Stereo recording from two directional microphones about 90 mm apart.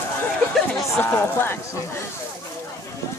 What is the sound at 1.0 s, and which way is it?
Speech, 25° left (ahead or behind).